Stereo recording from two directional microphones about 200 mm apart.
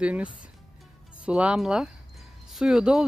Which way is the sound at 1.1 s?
5° right (ahead or behind).